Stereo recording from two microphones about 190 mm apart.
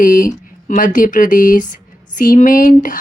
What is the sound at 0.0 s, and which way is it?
A woman's voice, 45° left (ahead or behind).